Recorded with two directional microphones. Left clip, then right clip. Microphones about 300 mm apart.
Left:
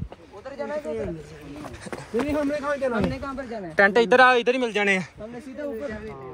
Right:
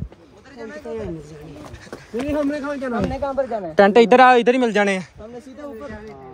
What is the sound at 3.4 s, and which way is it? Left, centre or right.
A man's voice, right.